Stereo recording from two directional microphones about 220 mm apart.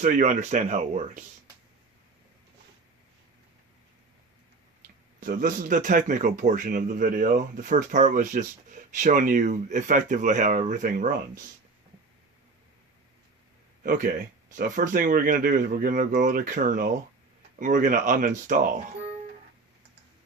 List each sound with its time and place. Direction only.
0.0 s speech: 35° right (ahead or behind)
5.2 s speech: 40° right (ahead or behind)
13.8 s speech: 35° right (ahead or behind)